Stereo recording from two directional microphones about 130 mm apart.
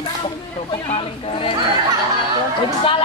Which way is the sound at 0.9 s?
45° left (ahead or behind).